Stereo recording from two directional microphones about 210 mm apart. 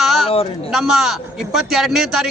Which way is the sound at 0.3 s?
25° left (ahead or behind).